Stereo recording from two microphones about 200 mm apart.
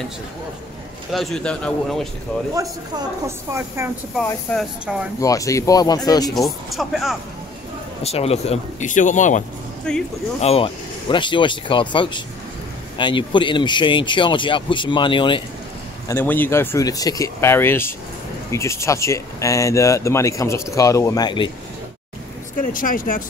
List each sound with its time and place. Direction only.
1.1 s a man's voice: centre (ahead or behind)
3.3 s a woman's voice: 15° right (ahead or behind)
4.2 s speech: 5° left (ahead or behind)
6.3 s a man's voice: centre (ahead or behind)
8.0 s speech: 30° left (ahead or behind)
9.9 s a man's voice: 5° left (ahead or behind)
10.4 s speech: 30° left (ahead or behind)
16.1 s speech: 10° left (ahead or behind)
22.6 s speech: 45° left (ahead or behind)